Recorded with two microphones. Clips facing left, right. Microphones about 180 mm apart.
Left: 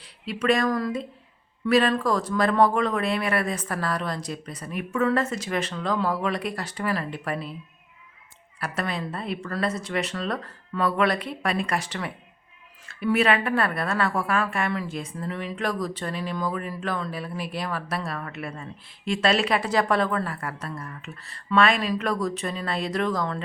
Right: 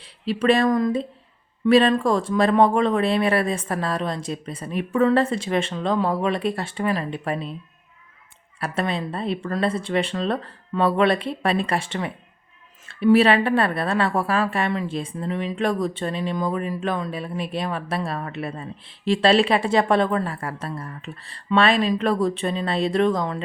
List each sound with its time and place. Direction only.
0.3 s a woman's voice: 30° right (ahead or behind)
8.6 s a woman's voice: 25° right (ahead or behind)